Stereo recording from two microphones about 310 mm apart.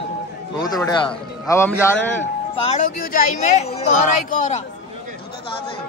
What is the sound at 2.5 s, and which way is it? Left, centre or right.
Speech, centre.